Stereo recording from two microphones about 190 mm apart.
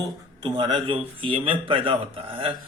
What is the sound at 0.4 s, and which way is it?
Speech, 25° right (ahead or behind).